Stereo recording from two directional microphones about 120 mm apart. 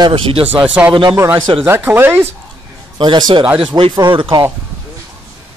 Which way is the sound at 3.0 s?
40° right (ahead or behind).